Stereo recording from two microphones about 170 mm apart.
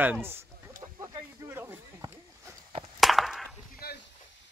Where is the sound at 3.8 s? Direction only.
65° left (ahead or behind).